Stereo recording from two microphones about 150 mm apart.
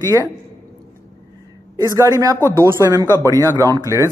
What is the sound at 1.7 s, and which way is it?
Speech, 20° right (ahead or behind).